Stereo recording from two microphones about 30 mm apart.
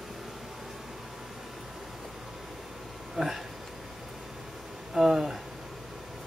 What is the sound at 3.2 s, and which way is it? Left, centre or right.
Speech, centre.